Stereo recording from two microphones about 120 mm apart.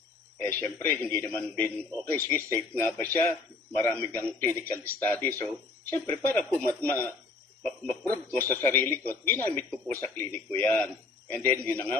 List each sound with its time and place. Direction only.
0.3 s a man's voice: 20° left (ahead or behind)
8.1 s a man's voice: 20° left (ahead or behind)